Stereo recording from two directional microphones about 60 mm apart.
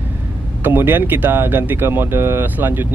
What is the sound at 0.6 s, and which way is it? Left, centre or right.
Speech, right.